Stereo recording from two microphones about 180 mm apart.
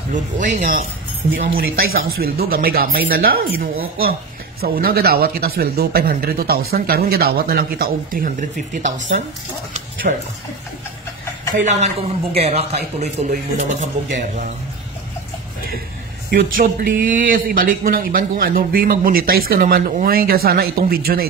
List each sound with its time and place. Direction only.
1.3 s speech: 55° right (ahead or behind)
10.1 s speech: 45° right (ahead or behind)
11.6 s a man's voice: 40° right (ahead or behind)
16.3 s speech: 55° right (ahead or behind)